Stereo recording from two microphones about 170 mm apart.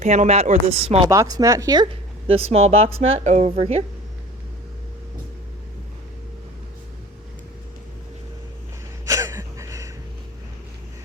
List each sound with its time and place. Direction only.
0.0 s speech: 45° right (ahead or behind)
1.0 s speech: 20° right (ahead or behind); by 3.8 s 40° right (ahead or behind)
9.0 s a sound: 20° right (ahead or behind)